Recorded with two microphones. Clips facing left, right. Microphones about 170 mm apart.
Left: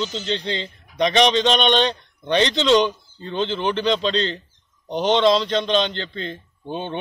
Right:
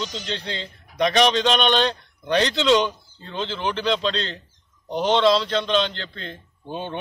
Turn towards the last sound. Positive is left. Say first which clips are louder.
# left 2 dB
turn(degrees=-5)  # may be behind; listen again after turning